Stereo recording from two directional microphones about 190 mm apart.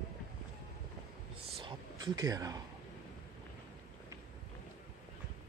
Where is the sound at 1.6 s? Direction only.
20° right (ahead or behind).